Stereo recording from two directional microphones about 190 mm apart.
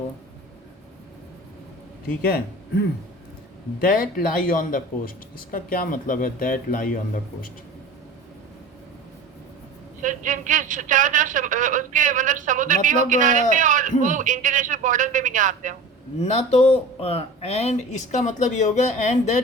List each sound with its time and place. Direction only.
2.0 s speech: 50° left (ahead or behind)
3.8 s speech: 50° left (ahead or behind)
10.0 s a woman's voice: 40° right (ahead or behind)
16.2 s speech: 35° left (ahead or behind)